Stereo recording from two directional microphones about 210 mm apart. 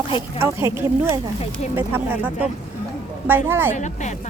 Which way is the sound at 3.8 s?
35° left (ahead or behind).